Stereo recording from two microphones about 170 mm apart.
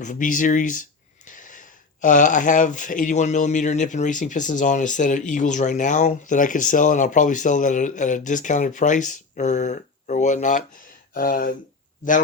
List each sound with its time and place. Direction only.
0.0 s speech: 50° left (ahead or behind)
11.1 s speech: 55° left (ahead or behind)